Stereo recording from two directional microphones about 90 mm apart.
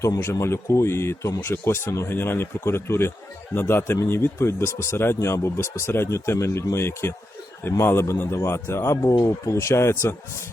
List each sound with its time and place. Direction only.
0.2 s speech: 30° left (ahead or behind)